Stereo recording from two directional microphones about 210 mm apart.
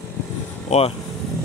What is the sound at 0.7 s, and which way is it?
Speech, 35° left (ahead or behind).